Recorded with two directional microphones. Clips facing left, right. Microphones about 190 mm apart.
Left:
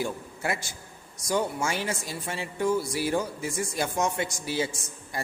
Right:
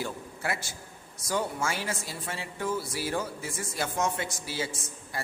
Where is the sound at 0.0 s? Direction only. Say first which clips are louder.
Left 3 dB; 20° left (ahead or behind).